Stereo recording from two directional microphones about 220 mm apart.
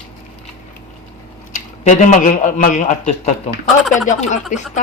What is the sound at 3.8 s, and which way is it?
Speech, centre (ahead or behind).